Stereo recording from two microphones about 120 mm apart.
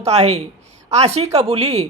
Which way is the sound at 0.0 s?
65° right (ahead or behind).